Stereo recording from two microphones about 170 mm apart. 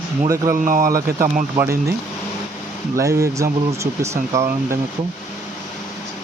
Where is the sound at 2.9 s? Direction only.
20° right (ahead or behind).